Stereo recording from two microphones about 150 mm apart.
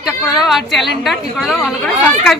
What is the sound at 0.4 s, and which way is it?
A woman's voice, centre (ahead or behind).